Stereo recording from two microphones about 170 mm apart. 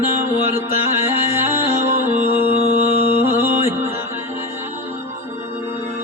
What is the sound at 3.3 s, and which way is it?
Music, 15° right (ahead or behind).